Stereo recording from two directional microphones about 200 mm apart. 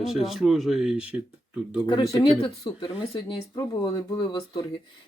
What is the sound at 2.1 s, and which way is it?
Speech, 25° left (ahead or behind).